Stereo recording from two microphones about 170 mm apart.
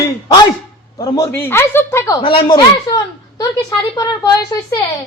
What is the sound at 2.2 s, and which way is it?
A man's voice, 30° left (ahead or behind).